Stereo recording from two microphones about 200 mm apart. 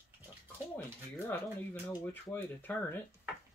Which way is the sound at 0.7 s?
10° left (ahead or behind).